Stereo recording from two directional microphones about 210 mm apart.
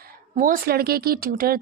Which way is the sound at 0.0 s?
40° right (ahead or behind).